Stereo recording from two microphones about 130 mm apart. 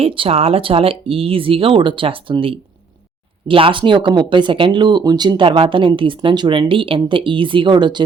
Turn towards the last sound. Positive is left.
turn(degrees=-35)  # may be behind; listen again after turning